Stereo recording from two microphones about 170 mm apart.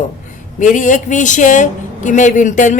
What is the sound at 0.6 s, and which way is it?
A woman's voice, 50° left (ahead or behind).